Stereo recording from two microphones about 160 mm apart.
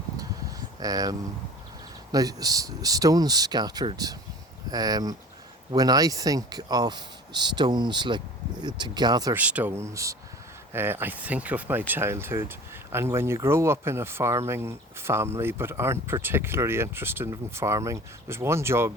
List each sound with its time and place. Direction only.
0.8 s speech: 20° right (ahead or behind)
2.1 s speech: 25° right (ahead or behind)
9.3 s speech: 10° right (ahead or behind)